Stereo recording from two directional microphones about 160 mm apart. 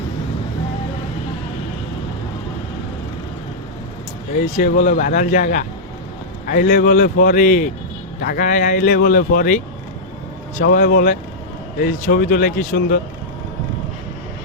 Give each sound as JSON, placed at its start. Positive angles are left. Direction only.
{"t": 4.5, "sound": "speech", "side_deg": 55}
{"t": 10.7, "sound": "speech", "side_deg": 65}